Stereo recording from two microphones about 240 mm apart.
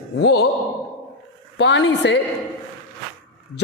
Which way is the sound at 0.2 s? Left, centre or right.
Left.